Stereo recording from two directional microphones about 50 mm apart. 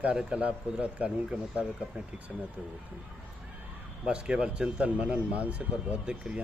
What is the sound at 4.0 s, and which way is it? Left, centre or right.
Speech, centre.